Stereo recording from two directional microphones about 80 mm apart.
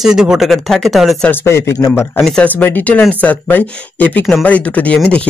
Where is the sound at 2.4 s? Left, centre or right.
Left.